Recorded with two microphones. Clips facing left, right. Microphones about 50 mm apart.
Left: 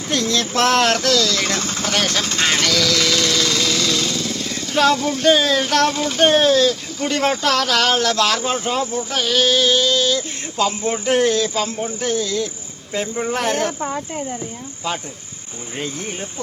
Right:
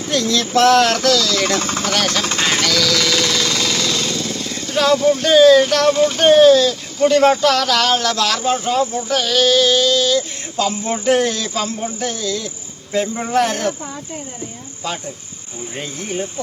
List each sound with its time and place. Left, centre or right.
0.1 s speech: left
0.9 s a sound: left
1.1 s speech: centre
1.5 s speech: right
2.4 s jackhammer: centre
4.7 s speech: centre; by 8.4 s left
8.4 s speech: centre
12.9 s speech: centre
13.3 s speech: centre